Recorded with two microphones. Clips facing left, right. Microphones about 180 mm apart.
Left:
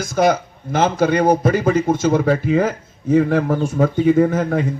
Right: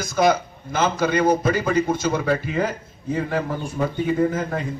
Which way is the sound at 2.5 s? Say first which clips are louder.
Left 6 dB; 80° left.